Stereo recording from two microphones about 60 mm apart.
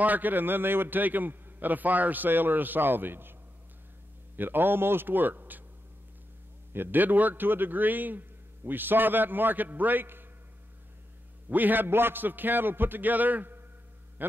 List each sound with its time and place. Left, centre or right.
0.0 s a man's voice: right
4.4 s a man's voice: right
6.7 s a man's voice: right
11.4 s a man's voice: right